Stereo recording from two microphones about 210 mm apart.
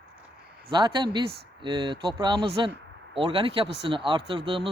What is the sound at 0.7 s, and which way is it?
Speech, 20° right (ahead or behind).